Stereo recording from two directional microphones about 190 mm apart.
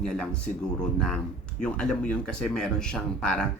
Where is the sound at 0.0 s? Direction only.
5° left (ahead or behind).